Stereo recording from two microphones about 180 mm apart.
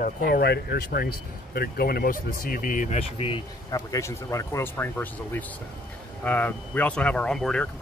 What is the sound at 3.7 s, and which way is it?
Speech, 20° left (ahead or behind).